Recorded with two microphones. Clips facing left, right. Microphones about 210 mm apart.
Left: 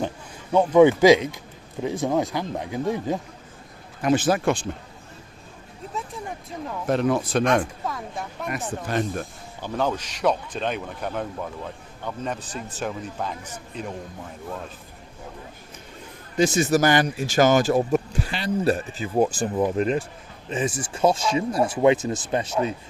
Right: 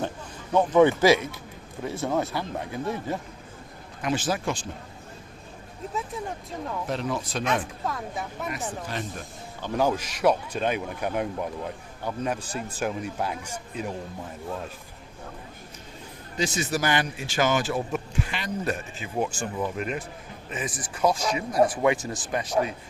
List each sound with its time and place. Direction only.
0.5 s speech: 10° left (ahead or behind)
4.0 s speech: 55° left (ahead or behind)
6.8 s speech: 55° left (ahead or behind)
7.9 s speech: centre (ahead or behind)
8.9 s speech: 50° left (ahead or behind)
9.7 s speech: 10° right (ahead or behind)
16.4 s speech: 45° left (ahead or behind); by 22.7 s 30° left (ahead or behind)